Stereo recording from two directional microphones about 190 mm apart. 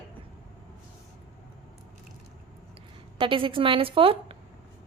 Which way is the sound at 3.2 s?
25° right (ahead or behind).